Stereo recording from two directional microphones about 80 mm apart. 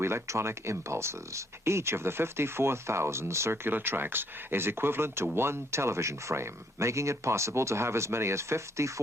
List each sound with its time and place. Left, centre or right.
0.0 s speech: right